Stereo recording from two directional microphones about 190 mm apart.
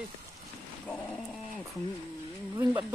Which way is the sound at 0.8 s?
10° left (ahead or behind).